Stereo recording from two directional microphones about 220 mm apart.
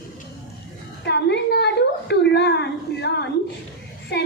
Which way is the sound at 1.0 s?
50° left (ahead or behind).